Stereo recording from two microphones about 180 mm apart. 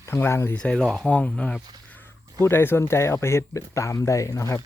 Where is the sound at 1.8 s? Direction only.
10° left (ahead or behind).